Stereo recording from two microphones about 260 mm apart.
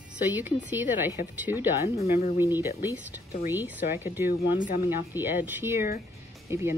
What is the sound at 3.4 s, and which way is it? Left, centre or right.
A woman's voice, centre.